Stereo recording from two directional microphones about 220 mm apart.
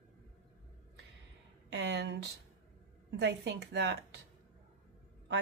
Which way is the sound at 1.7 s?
50° right (ahead or behind).